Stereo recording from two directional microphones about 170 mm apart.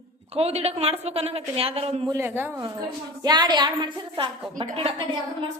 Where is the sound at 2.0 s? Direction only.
15° right (ahead or behind); by 5.0 s 35° right (ahead or behind).